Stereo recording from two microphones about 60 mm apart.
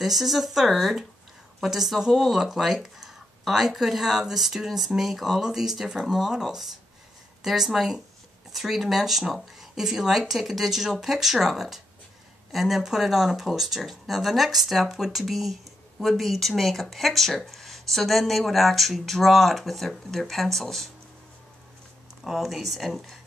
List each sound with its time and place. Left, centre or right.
0.0 s speech: centre
22.2 s speech: centre